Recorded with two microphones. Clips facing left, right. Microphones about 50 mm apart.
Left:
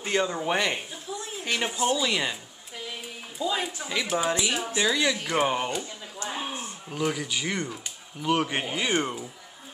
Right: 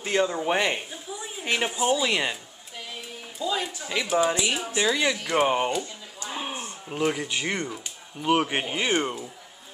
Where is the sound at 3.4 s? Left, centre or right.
Centre.